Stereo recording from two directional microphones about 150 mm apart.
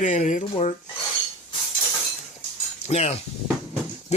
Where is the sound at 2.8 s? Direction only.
45° left (ahead or behind).